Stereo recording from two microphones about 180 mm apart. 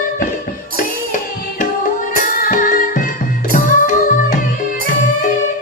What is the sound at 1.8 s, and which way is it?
Music, 50° left (ahead or behind).